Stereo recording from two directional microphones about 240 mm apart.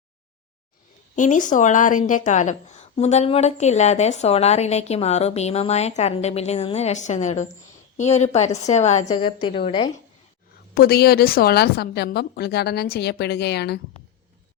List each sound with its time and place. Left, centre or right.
1.1 s speech: left
10.8 s a woman's voice: left